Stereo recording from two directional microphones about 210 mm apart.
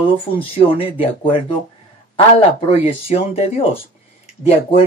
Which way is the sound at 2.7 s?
30° left (ahead or behind).